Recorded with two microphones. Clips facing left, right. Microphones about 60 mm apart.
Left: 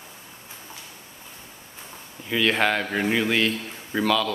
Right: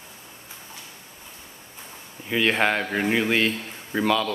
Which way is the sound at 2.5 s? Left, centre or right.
Centre.